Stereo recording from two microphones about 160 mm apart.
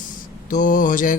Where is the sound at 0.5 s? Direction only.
55° left (ahead or behind).